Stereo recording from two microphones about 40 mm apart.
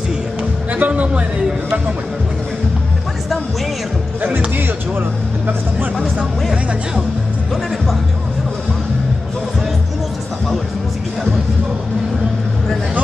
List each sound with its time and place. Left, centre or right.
0.7 s music: right